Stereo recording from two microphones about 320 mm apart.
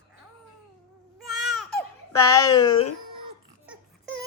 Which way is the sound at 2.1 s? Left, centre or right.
Centre.